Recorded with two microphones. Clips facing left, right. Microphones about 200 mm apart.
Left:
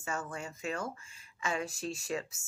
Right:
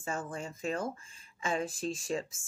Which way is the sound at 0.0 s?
30° right (ahead or behind).